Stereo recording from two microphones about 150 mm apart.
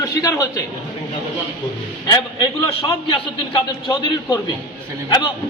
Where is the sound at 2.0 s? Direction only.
30° left (ahead or behind).